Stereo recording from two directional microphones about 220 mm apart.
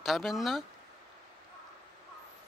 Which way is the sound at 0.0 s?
Centre (ahead or behind).